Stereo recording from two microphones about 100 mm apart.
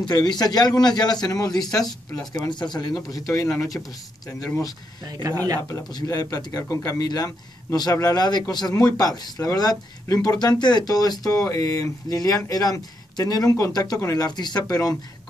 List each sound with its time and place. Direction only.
0.0 s a man's voice: 45° left (ahead or behind)
3.1 s speech: 35° left (ahead or behind)
3.8 s speech: 25° left (ahead or behind)
5.0 s speech: 40° right (ahead or behind)
6.0 s speech: 40° left (ahead or behind)